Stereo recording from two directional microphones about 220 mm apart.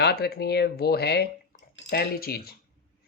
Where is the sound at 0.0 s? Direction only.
45° left (ahead or behind).